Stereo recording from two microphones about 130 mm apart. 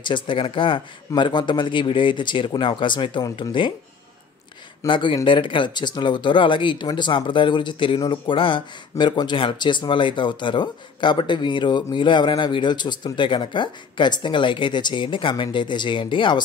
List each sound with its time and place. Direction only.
0.0 s speech: 40° left (ahead or behind)
4.8 s speech: 40° left (ahead or behind)